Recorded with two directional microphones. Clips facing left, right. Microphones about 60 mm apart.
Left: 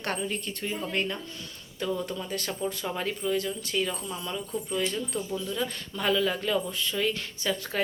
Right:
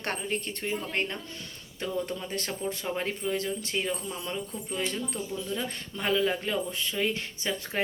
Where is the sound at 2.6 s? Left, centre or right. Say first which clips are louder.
Even; right.